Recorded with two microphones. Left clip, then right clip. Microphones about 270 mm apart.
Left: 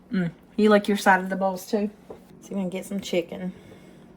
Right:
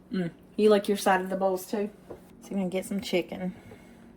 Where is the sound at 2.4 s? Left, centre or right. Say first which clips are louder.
Even; centre.